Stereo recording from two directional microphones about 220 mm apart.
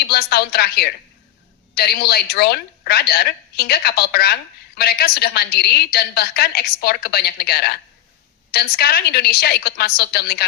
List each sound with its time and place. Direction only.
0.0 s a woman's voice: 45° left (ahead or behind)